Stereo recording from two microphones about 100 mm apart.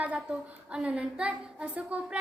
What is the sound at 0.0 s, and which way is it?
A woman's voice, 10° right (ahead or behind).